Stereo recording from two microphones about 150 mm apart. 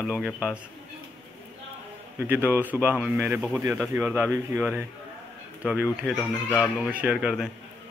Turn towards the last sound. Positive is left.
turn(degrees=-5)  # may be behind; listen again after turning